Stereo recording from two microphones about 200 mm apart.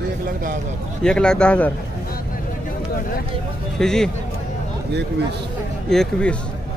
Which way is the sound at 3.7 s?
5° left (ahead or behind).